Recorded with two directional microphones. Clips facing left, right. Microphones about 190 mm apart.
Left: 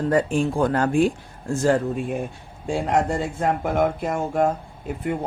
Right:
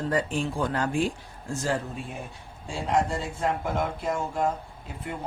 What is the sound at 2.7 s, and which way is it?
Speech, 55° left (ahead or behind).